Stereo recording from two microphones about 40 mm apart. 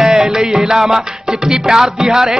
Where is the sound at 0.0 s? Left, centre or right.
Centre.